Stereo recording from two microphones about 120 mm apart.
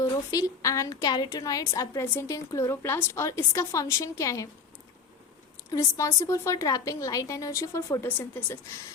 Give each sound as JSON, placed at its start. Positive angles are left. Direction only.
{"t": 0.0, "sound": "a woman's voice", "side_deg": 30}
{"t": 5.7, "sound": "a woman's voice", "side_deg": 25}